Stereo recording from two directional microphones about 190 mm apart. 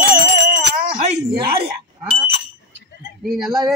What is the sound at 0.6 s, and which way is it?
Speech, 45° right (ahead or behind).